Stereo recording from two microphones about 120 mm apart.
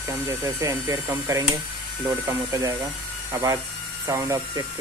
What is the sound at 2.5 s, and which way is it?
Speech, 30° right (ahead or behind).